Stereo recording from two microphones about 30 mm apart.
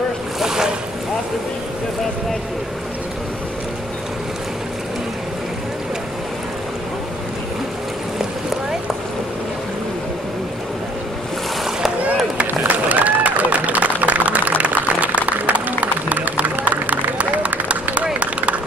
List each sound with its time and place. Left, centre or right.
0.4 s boat: centre
12.8 s run: right
18.2 s a sound: right